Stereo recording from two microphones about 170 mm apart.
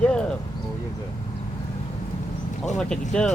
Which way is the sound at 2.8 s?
5° left (ahead or behind).